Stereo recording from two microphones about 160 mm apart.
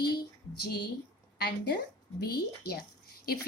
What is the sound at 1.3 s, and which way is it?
A woman's voice, 85° left.